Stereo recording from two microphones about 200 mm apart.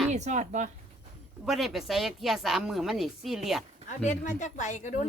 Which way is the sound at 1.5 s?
Centre (ahead or behind).